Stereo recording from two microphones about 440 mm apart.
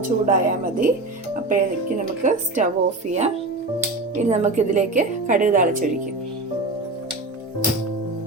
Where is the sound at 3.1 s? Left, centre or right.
Centre.